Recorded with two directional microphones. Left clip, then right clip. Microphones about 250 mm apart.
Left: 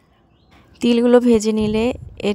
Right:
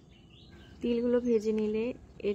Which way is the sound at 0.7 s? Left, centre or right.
Left.